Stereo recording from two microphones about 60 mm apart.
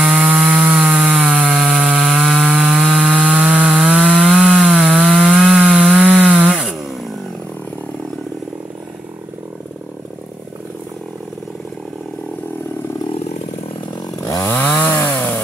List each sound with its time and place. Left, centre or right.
0.0 s wood: centre
4.8 s sawing: centre
6.9 s chainsaw: centre
14.8 s chainsaw: left